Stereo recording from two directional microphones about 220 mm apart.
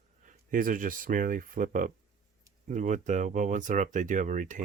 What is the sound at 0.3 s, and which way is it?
Speech, 35° right (ahead or behind).